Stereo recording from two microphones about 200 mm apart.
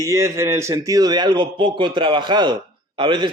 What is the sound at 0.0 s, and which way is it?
A man's voice, 15° right (ahead or behind).